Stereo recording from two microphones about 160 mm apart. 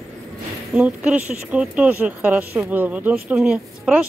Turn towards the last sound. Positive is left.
turn(degrees=-5)  # may be behind; listen again after turning